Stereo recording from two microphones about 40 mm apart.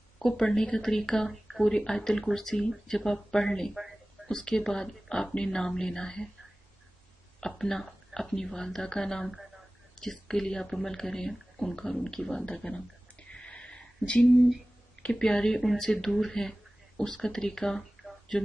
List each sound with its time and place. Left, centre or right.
0.4 s speech: centre
7.5 s speech: centre
12.6 s a sound: left
15.1 s speech: centre
15.6 s speech: centre